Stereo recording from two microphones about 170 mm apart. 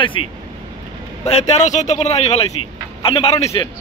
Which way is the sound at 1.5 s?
45° left (ahead or behind).